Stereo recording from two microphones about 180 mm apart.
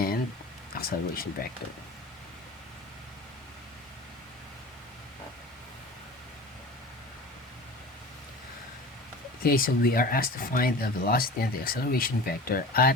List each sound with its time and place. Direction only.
0.8 s speech: 55° left (ahead or behind)
9.4 s speech: 55° left (ahead or behind)